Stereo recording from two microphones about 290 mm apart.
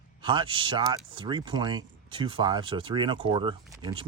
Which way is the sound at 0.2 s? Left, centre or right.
Centre.